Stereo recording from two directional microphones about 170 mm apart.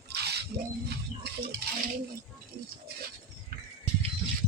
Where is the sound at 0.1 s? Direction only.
70° right (ahead or behind).